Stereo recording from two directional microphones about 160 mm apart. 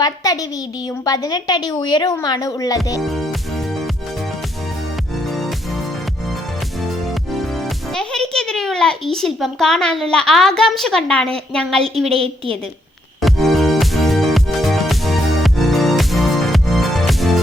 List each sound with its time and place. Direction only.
0.0 s a woman's voice: 25° left (ahead or behind)
7.9 s a child's voice: 5° left (ahead or behind)
12.1 s a woman's voice: 35° right (ahead or behind)
13.2 s music: centre (ahead or behind)